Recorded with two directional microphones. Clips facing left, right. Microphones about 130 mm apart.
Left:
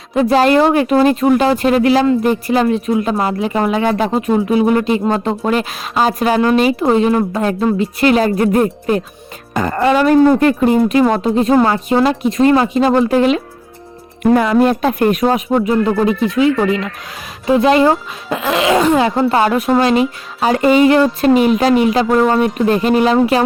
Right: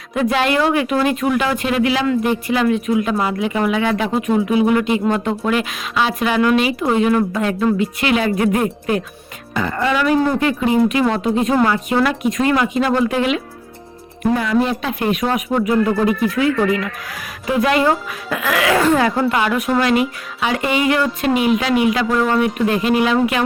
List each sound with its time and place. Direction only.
0.1 s speech: 35° left (ahead or behind)
14.3 s speech: 60° left (ahead or behind); by 23.4 s 35° left (ahead or behind)